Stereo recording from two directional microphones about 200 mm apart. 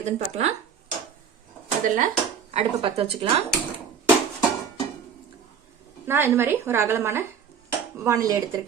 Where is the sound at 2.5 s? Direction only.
30° right (ahead or behind).